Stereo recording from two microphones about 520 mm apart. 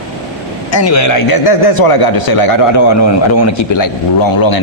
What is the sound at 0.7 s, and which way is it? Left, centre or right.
A man's voice, left.